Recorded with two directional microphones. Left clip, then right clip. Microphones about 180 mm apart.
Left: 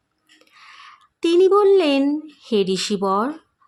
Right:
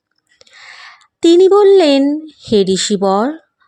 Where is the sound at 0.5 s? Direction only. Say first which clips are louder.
Right 8 dB; 30° right (ahead or behind).